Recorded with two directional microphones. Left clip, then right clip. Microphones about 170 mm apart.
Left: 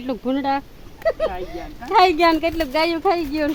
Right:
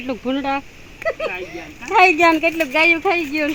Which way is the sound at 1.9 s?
20° right (ahead or behind).